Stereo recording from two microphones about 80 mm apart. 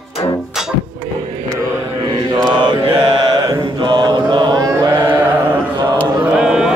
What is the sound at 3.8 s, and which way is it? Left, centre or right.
Mantra, right.